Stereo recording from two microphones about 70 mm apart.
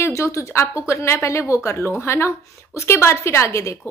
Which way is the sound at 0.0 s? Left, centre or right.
Left.